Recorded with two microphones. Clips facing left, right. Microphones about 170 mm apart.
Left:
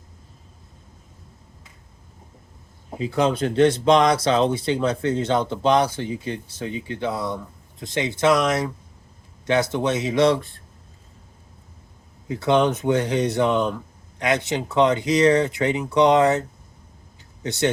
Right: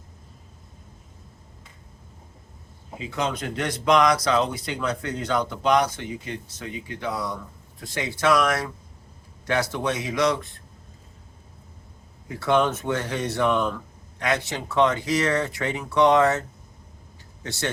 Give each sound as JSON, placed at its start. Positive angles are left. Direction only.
{"t": 3.0, "sound": "speech", "side_deg": 35}
{"t": 12.3, "sound": "speech", "side_deg": 20}
{"t": 17.4, "sound": "speech", "side_deg": 20}